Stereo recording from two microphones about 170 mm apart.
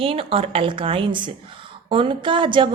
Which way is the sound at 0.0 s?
35° right (ahead or behind).